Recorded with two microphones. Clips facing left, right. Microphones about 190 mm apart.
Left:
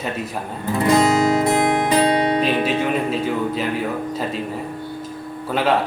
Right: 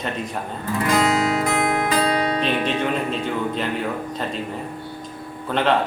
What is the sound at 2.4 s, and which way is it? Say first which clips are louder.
Speech: left 2 dB; 5° left (ahead or behind).